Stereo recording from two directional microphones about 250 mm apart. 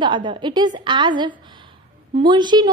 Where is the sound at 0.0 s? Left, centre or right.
Centre.